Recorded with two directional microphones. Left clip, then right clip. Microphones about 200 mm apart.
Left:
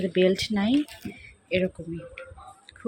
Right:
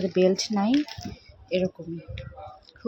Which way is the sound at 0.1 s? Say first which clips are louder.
Even; 5° right (ahead or behind).